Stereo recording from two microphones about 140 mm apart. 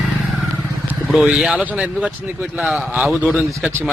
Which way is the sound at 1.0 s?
5° right (ahead or behind).